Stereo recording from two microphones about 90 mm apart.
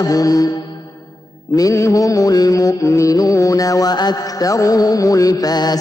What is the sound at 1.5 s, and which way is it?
Mantra, 35° left (ahead or behind).